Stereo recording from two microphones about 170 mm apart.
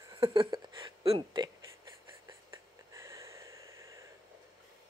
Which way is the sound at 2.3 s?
15° right (ahead or behind).